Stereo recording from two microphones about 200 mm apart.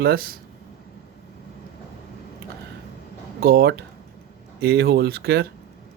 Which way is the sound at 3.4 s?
50° right (ahead or behind).